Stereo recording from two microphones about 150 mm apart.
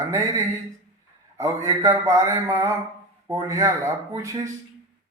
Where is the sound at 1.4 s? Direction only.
20° right (ahead or behind).